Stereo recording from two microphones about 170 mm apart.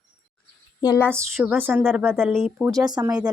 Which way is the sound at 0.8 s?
20° left (ahead or behind).